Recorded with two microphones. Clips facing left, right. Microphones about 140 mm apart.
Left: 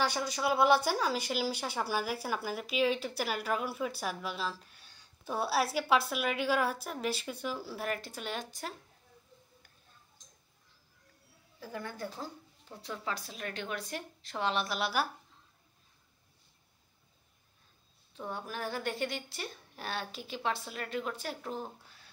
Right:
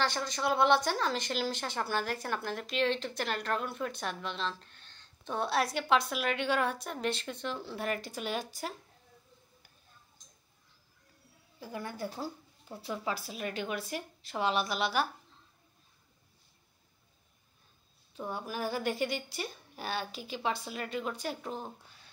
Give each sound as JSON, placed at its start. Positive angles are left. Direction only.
{"t": 0.0, "sound": "speech", "side_deg": 10}
{"t": 11.6, "sound": "speech", "side_deg": -15}
{"t": 18.1, "sound": "speech", "side_deg": -5}